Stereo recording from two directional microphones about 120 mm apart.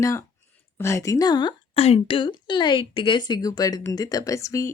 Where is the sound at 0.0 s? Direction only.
25° left (ahead or behind).